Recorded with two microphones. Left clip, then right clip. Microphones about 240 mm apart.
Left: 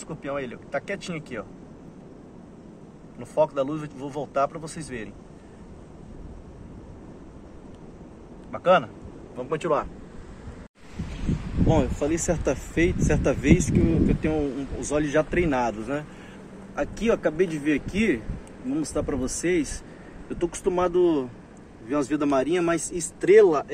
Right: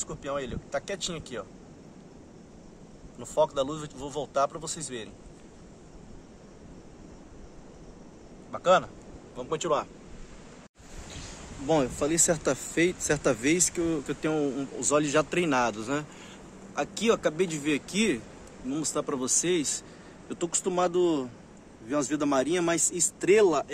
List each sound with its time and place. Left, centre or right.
0.2 s a man's voice: centre
3.3 s a man's voice: centre
8.5 s a man's voice: centre
11.6 s speech: right
19.0 s a man's voice: centre
19.4 s speech: right